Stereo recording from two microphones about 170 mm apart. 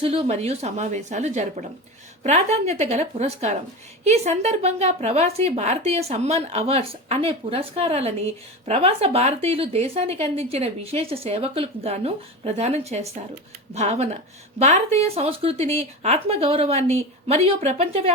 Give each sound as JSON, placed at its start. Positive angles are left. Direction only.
{"t": 0.0, "sound": "speech", "side_deg": -35}